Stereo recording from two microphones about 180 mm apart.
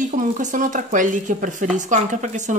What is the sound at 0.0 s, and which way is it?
A woman's voice, 45° right (ahead or behind).